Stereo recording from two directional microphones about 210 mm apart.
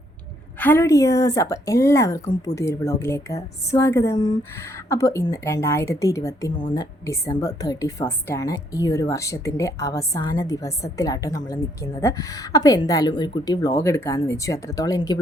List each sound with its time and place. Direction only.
0.6 s a woman's voice: 10° left (ahead or behind)